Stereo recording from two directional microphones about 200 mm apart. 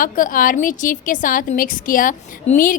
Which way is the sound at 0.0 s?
45° left (ahead or behind).